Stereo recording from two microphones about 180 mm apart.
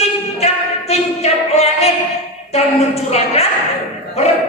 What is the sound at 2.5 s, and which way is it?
Speech, 35° left (ahead or behind).